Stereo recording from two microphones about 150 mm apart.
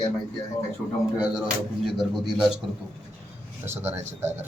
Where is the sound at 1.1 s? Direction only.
5° right (ahead or behind).